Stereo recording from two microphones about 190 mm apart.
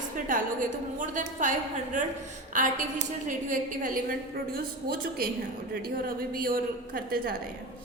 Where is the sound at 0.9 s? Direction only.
40° right (ahead or behind).